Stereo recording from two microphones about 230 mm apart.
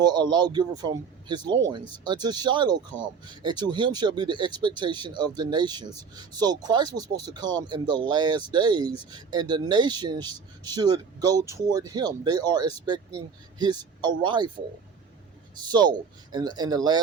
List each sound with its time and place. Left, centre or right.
0.0 s speech: centre
15.7 s speech: centre